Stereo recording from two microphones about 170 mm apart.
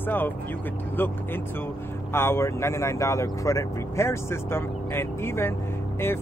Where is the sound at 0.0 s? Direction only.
10° left (ahead or behind).